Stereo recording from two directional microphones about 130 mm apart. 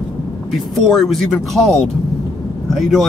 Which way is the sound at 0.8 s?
Centre (ahead or behind).